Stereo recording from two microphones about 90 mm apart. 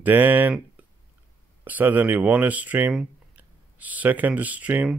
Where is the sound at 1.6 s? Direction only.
20° right (ahead or behind).